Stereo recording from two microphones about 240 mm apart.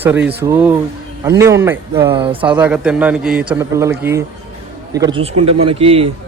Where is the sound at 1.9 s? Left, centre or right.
Right.